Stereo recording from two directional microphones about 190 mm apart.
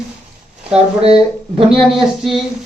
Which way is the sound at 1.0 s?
30° right (ahead or behind).